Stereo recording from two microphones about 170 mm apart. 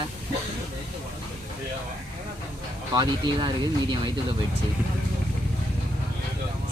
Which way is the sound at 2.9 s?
25° right (ahead or behind).